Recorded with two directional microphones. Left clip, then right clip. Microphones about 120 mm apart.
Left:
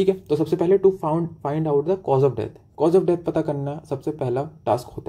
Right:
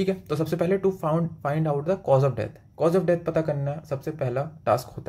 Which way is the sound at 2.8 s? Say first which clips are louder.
Left 3 dB; 20° left (ahead or behind).